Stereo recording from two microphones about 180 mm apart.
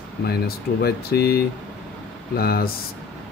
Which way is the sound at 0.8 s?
60° left (ahead or behind).